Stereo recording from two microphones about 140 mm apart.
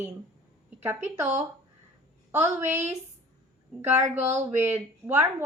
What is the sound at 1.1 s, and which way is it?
A woman's voice, 15° right (ahead or behind).